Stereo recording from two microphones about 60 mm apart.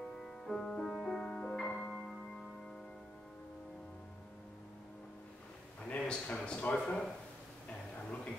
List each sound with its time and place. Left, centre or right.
0.2 s music: centre
5.9 s speech: centre